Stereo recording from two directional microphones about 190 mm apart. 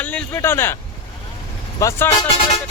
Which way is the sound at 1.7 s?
15° left (ahead or behind).